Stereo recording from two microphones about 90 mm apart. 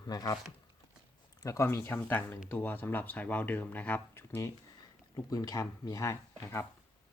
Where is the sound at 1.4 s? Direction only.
35° left (ahead or behind); by 4.2 s 20° left (ahead or behind).